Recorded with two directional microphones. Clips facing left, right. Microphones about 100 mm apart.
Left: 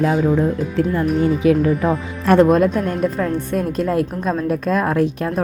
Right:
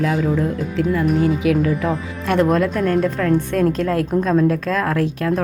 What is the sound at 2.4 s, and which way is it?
A woman's voice, 20° left (ahead or behind).